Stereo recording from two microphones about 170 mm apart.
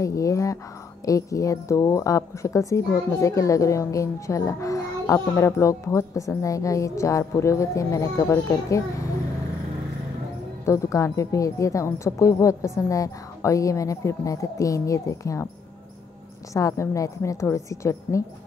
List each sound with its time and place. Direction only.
0.0 s a woman's voice: 20° left (ahead or behind)
10.6 s a woman's voice: 20° left (ahead or behind)
16.5 s a woman's voice: 20° left (ahead or behind)